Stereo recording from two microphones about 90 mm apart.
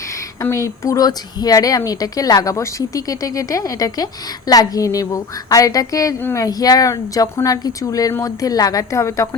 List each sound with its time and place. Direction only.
0.5 s speech: 35° left (ahead or behind)